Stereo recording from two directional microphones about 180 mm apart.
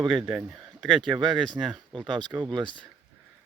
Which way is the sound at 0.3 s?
5° right (ahead or behind).